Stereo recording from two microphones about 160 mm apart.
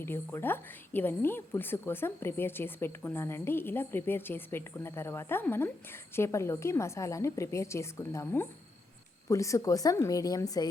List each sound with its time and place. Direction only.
0.0 s a woman's voice: 15° left (ahead or behind)